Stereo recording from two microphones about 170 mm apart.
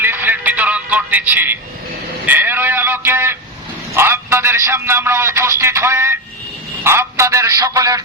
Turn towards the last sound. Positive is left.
turn(degrees=-20)  # may be behind; listen again after turning